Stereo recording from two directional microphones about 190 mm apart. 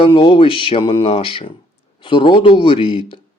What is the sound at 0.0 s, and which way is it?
Speech, 25° left (ahead or behind).